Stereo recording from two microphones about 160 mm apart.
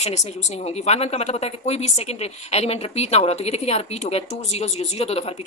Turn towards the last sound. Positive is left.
turn(degrees=40)  # may be behind; listen again after turning